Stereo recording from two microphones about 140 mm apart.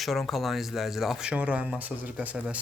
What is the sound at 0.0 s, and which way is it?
Speech, centre (ahead or behind).